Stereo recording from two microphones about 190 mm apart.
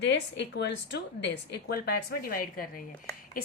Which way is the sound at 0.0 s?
65° left (ahead or behind).